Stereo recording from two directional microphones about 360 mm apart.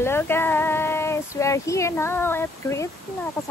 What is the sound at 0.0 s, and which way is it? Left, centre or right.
Speech, centre.